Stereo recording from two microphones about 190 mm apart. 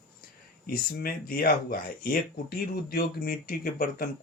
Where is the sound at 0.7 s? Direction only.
50° left (ahead or behind).